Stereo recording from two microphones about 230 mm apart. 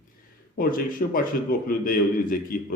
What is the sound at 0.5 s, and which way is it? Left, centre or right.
A man's voice, left.